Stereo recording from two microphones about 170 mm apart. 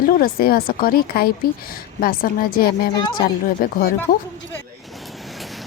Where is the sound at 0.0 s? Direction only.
60° left (ahead or behind).